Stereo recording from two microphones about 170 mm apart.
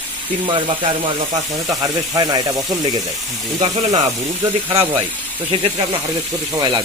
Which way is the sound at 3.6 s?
45° right (ahead or behind).